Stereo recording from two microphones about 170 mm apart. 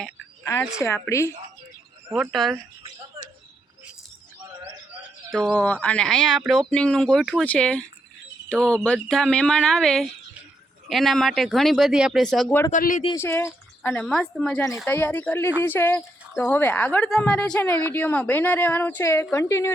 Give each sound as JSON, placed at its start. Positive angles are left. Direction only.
{"t": 0.8, "sound": "speech", "side_deg": 15}
{"t": 2.0, "sound": "speech", "side_deg": -5}
{"t": 5.3, "sound": "speech", "side_deg": 0}
{"t": 12.7, "sound": "speech", "side_deg": 50}
{"t": 13.1, "sound": "speech", "side_deg": 15}